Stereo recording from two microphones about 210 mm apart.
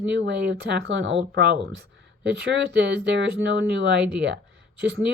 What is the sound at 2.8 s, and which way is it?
Speech, 55° right (ahead or behind).